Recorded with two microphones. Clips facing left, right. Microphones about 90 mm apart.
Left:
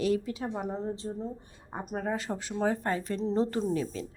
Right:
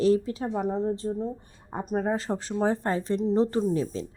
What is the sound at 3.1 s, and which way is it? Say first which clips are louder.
Speech: right 6 dB; 15° right (ahead or behind).